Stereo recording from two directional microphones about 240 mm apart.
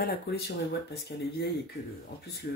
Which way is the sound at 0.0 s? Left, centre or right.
Left.